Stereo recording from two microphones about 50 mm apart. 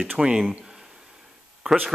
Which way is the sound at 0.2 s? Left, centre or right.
Centre.